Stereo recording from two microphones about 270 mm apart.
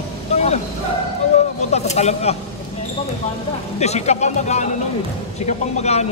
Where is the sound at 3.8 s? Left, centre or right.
Left.